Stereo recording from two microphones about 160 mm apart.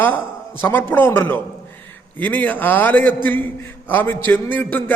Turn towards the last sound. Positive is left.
turn(degrees=10)  # may be behind; listen again after turning